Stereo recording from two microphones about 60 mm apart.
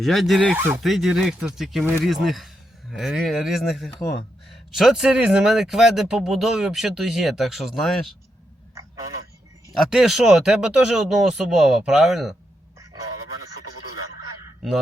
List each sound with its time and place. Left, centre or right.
0.0 s speech: centre
0.5 s speech: right
0.8 s speech: centre
9.7 s speech: centre